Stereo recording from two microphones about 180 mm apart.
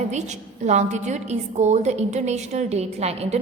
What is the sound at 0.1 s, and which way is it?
A woman's voice, 40° right (ahead or behind).